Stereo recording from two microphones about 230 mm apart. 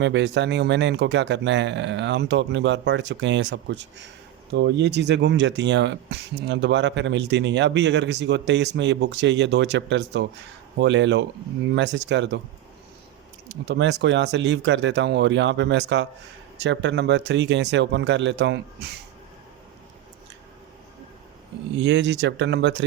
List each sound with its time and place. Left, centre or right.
0.0 s speech: right
13.5 s speech: right
21.8 s speech: right